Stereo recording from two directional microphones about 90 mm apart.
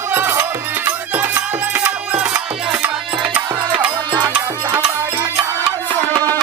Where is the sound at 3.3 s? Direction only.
15° right (ahead or behind).